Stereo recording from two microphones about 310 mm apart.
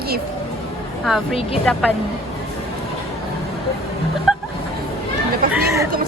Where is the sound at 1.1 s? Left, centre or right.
Centre.